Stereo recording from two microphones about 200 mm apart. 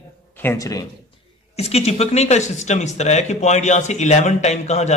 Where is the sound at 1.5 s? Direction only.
30° left (ahead or behind).